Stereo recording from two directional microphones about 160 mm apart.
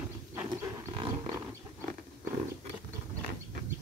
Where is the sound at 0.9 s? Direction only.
35° right (ahead or behind).